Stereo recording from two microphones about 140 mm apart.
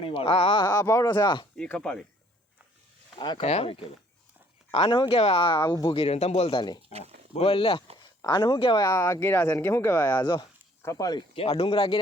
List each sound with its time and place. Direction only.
0.0 s speech: 40° left (ahead or behind)
1.5 s speech: 10° left (ahead or behind)
3.2 s speech: 35° left (ahead or behind)
3.4 s a man's voice: 45° left (ahead or behind)
6.0 s a man's voice: 50° left (ahead or behind); by 10.2 s 15° left (ahead or behind)
10.2 s speech: 30° left (ahead or behind)
11.3 s speech: 45° left (ahead or behind)